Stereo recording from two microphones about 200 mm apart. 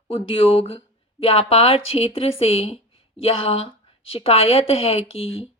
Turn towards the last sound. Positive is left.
turn(degrees=30)  # may be behind; listen again after turning